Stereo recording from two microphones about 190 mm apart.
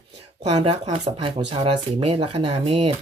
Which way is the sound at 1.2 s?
25° right (ahead or behind).